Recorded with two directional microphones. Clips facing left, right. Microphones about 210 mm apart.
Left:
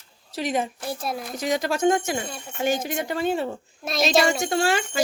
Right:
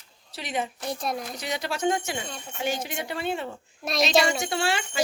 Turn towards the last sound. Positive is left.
turn(degrees=45)  # may be behind; listen again after turning